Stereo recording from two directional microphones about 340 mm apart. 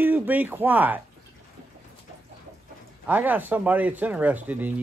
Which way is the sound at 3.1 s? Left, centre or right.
Centre.